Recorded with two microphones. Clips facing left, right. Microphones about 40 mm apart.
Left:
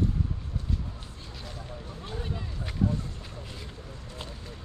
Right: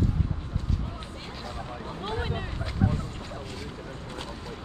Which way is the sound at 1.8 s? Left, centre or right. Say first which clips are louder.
Right 6 dB; right.